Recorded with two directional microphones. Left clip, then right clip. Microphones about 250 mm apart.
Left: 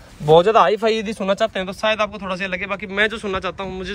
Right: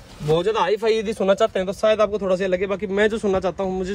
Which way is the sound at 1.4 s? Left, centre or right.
Centre.